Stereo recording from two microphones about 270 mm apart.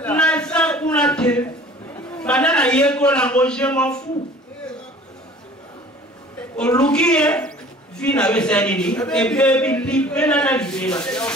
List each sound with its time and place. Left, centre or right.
0.0 s a sound: centre
2.0 s a man's voice: centre
6.5 s speech: centre